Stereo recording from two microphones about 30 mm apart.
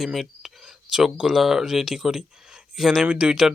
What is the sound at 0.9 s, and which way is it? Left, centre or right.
Speech, right.